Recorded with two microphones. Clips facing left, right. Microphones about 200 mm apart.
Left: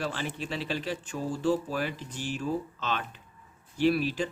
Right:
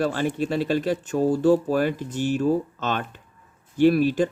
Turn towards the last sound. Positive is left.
turn(degrees=-50)  # may be behind; listen again after turning